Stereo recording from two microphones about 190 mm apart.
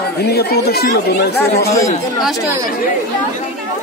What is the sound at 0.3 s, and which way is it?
Speech, 55° left (ahead or behind).